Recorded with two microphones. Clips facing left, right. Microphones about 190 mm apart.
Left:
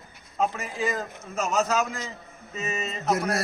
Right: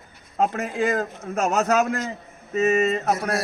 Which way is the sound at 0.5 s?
60° right (ahead or behind).